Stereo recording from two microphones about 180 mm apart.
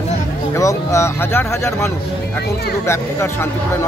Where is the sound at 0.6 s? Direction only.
15° left (ahead or behind).